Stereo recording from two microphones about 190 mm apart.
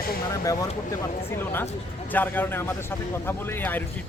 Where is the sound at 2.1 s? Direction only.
10° left (ahead or behind).